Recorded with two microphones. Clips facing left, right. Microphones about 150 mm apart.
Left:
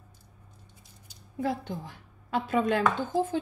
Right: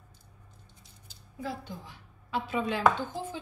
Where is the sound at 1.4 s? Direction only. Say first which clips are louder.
Left 7 dB; 55° left (ahead or behind).